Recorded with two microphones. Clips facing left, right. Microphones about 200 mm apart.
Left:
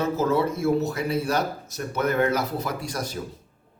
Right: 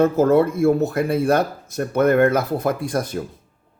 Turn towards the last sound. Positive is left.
turn(degrees=-55)  # may be behind; listen again after turning